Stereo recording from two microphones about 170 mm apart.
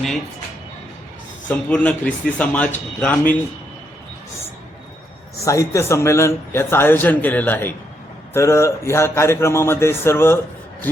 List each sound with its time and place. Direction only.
1.5 s a man's voice: 5° left (ahead or behind)
5.5 s a man's voice: 20° left (ahead or behind)